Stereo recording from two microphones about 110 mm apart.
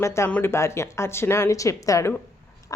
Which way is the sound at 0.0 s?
25° left (ahead or behind).